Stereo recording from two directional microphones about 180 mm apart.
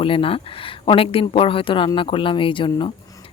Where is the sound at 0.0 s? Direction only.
30° left (ahead or behind).